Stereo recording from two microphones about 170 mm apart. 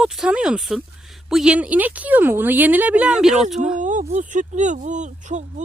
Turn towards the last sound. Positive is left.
turn(degrees=-45)  # may be behind; listen again after turning